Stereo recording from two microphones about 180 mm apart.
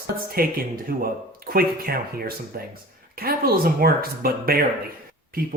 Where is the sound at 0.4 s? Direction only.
55° right (ahead or behind).